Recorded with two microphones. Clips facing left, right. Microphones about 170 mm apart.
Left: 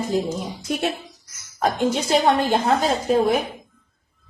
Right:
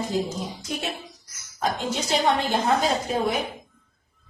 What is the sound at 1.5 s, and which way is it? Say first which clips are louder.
A woman's voice: left 6 dB; 55° left (ahead or behind).